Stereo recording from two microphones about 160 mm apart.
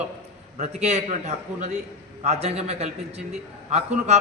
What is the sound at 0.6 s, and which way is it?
A man's voice, 45° right (ahead or behind).